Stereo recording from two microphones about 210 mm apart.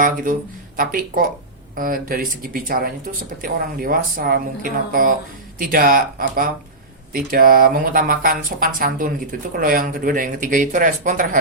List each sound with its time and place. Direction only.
0.8 s speech: 40° right (ahead or behind)